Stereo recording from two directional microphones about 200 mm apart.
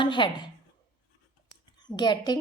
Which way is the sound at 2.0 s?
20° left (ahead or behind).